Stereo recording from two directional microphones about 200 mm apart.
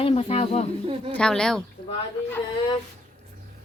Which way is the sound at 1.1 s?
5° left (ahead or behind).